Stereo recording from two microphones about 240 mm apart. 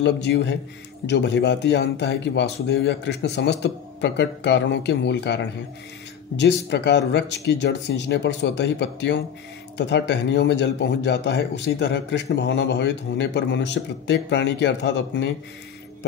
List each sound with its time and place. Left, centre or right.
0.0 s speech: left